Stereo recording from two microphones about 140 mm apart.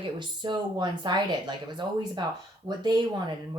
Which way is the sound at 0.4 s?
30° right (ahead or behind).